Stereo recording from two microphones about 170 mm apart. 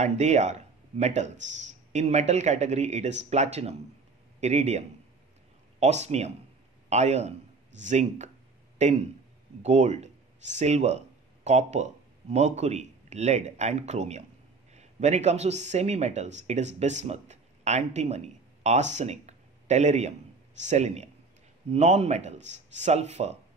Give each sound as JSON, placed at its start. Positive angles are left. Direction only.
{"t": 0.0, "sound": "a man's voice", "side_deg": -45}